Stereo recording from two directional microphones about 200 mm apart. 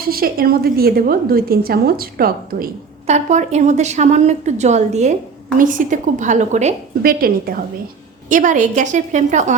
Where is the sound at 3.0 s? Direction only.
35° right (ahead or behind).